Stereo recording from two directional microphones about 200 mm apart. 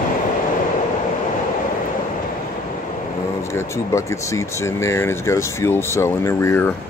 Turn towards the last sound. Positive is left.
turn(degrees=15)  # may be behind; listen again after turning